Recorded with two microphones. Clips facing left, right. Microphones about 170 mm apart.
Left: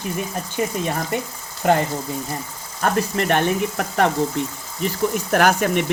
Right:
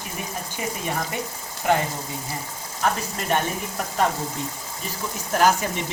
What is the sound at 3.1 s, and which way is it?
Speech, 70° left (ahead or behind).